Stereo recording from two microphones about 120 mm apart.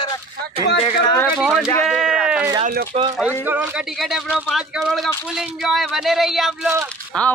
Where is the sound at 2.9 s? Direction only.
60° right (ahead or behind).